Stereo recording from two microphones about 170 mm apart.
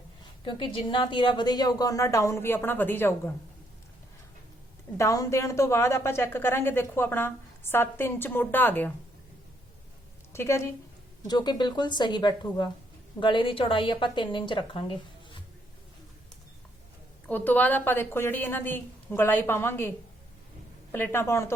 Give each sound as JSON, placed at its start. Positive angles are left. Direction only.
{"t": 0.4, "sound": "a woman's voice", "side_deg": 30}
{"t": 4.9, "sound": "a woman's voice", "side_deg": 20}
{"t": 10.3, "sound": "a woman's voice", "side_deg": 15}
{"t": 17.2, "sound": "a woman's voice", "side_deg": 10}
{"t": 20.9, "sound": "a woman's voice", "side_deg": 10}